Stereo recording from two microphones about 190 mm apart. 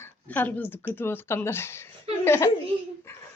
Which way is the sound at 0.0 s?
10° left (ahead or behind).